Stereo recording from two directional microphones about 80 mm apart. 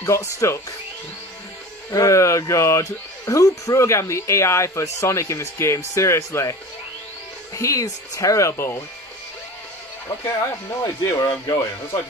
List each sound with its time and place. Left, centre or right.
0.0 s speech: left
1.9 s speech: left
7.5 s speech: left
10.0 s speech: left